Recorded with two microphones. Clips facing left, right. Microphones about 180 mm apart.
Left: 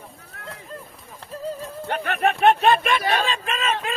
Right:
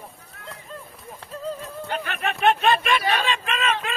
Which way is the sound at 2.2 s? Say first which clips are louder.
Left 4 dB; 45° left (ahead or behind).